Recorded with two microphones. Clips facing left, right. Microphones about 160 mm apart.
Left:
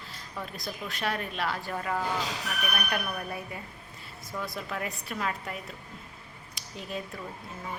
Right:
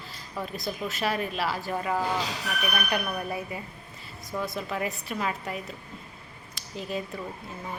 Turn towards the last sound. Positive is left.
turn(degrees=0)  # may be behind; listen again after turning